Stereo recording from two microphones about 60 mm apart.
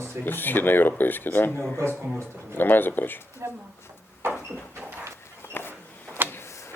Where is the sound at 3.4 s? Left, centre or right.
Right.